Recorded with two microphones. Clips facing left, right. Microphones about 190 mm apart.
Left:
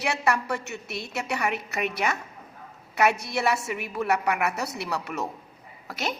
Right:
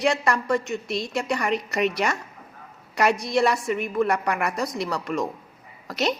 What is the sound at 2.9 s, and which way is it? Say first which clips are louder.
A woman's voice: right 3 dB; 5° left (ahead or behind).